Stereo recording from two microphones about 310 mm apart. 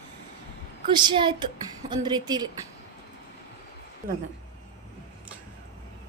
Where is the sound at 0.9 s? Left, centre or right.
Centre.